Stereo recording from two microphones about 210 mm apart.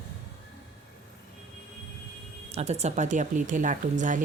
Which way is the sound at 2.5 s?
30° right (ahead or behind).